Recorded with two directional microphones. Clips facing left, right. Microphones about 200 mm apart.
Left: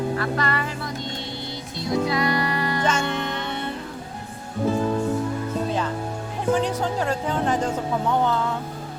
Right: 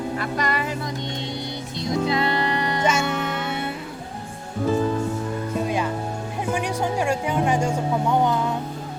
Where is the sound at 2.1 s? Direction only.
25° right (ahead or behind).